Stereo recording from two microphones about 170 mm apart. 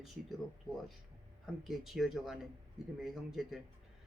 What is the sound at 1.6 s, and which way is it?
Speech, centre (ahead or behind).